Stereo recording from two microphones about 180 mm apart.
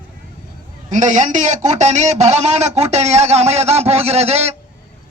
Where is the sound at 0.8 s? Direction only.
40° right (ahead or behind).